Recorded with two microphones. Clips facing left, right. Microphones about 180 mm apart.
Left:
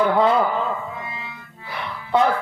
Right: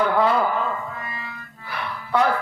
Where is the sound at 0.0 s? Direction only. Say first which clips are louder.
Left 2 dB; 20° left (ahead or behind).